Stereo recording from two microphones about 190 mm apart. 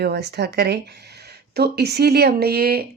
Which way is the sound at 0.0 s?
60° right (ahead or behind).